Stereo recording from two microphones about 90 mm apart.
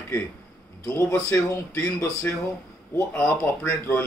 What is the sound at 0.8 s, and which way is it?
Speech, 30° left (ahead or behind).